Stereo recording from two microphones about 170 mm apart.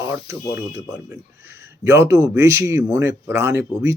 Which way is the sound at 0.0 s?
15° right (ahead or behind).